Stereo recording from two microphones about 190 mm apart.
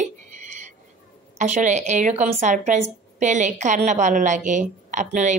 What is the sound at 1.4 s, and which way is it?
A woman's voice, 35° right (ahead or behind).